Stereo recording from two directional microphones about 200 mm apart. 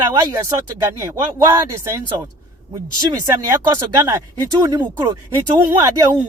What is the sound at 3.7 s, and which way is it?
Speech, 15° right (ahead or behind).